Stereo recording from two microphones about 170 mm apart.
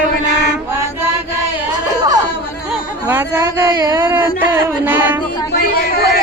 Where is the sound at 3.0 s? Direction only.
15° right (ahead or behind).